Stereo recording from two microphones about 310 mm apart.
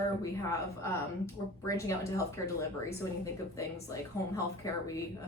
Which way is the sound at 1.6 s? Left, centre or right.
Centre.